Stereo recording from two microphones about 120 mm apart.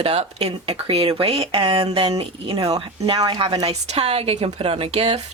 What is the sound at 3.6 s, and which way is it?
Speech, 60° right (ahead or behind).